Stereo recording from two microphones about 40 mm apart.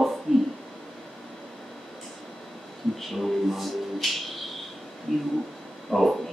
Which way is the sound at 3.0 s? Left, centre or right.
Centre.